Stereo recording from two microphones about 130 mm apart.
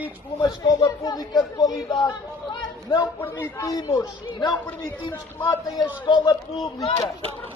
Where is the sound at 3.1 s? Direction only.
15° left (ahead or behind); by 4.5 s 30° left (ahead or behind).